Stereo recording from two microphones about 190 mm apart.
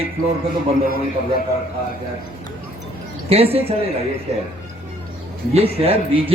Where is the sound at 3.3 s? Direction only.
30° right (ahead or behind).